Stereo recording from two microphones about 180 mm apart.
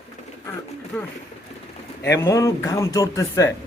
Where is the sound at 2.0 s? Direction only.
15° left (ahead or behind).